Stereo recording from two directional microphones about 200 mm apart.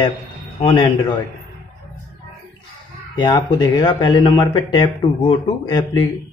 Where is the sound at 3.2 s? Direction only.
20° left (ahead or behind).